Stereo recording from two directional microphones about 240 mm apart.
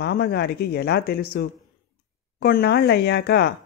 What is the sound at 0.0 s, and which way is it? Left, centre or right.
Speech, left.